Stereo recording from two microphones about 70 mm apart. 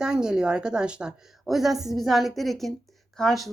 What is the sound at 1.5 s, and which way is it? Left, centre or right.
Speech, centre.